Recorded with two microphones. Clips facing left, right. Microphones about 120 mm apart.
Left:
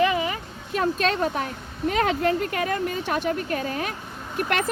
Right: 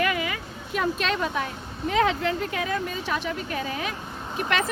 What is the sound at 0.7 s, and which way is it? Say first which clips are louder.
Speech: left 3 dB; 40° left (ahead or behind).